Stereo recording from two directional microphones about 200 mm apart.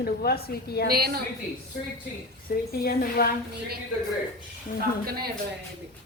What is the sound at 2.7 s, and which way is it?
Speech, 50° left (ahead or behind).